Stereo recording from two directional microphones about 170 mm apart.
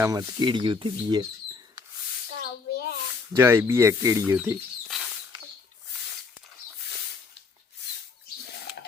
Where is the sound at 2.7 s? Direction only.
65° left (ahead or behind).